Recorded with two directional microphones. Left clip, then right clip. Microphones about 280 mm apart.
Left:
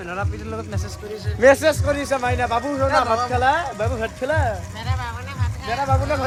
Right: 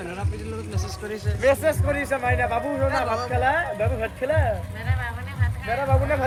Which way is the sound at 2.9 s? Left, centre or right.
Left.